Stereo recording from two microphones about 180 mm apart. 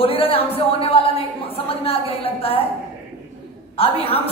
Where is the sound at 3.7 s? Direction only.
30° left (ahead or behind).